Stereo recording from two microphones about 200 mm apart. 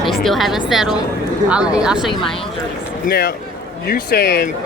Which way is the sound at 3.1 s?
55° left (ahead or behind).